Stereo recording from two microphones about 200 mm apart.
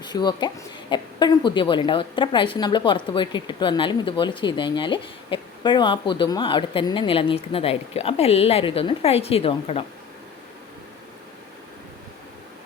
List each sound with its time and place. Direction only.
0.0 s speech: 20° left (ahead or behind)